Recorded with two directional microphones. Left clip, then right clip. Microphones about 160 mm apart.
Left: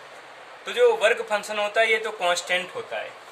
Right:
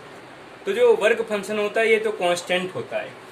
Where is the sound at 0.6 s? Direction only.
Centre (ahead or behind).